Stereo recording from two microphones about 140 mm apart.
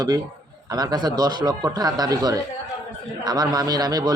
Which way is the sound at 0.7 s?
30° right (ahead or behind).